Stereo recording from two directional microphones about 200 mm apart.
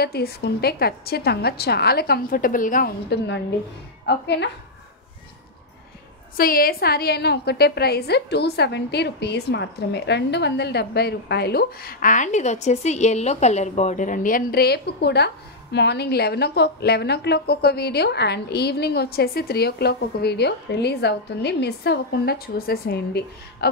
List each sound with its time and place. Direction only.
0.0 s a woman's voice: 50° left (ahead or behind)
6.3 s a woman's voice: 45° left (ahead or behind)